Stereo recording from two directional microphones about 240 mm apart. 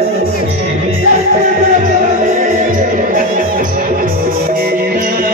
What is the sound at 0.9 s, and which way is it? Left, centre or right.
Music, right.